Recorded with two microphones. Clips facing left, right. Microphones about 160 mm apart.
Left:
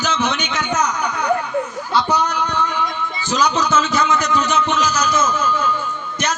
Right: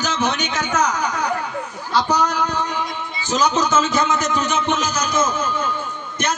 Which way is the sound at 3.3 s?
45° right (ahead or behind).